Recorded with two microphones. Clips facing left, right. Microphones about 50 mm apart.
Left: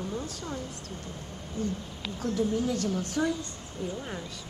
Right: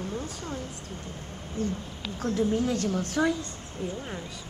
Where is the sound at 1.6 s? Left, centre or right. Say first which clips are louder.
Right 2 dB; right.